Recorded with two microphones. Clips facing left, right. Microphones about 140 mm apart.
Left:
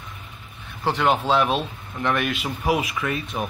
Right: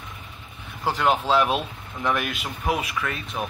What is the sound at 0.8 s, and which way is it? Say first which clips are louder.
Speech: left 1 dB; centre (ahead or behind).